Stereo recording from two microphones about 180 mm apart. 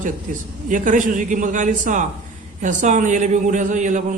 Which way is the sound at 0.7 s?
45° right (ahead or behind).